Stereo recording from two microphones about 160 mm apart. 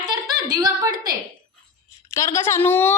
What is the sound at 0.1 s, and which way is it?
A woman's voice, 25° right (ahead or behind).